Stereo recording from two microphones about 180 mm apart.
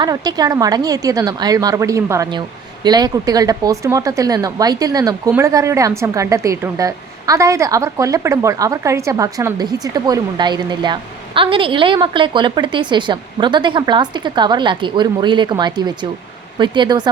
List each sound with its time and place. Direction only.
0.0 s a woman's voice: 20° right (ahead or behind)